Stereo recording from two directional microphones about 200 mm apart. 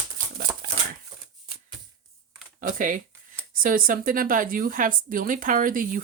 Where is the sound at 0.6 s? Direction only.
45° right (ahead or behind).